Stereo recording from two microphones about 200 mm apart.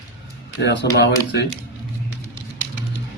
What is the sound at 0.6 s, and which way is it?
Speech, 60° left (ahead or behind).